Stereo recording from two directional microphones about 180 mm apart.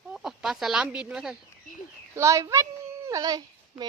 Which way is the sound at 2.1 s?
15° right (ahead or behind).